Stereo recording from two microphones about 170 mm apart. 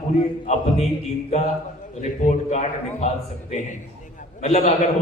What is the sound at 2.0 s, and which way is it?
Speech, 45° left (ahead or behind).